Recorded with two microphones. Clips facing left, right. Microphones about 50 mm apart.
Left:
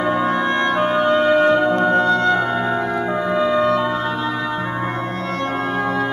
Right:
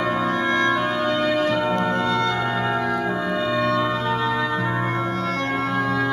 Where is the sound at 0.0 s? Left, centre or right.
Left.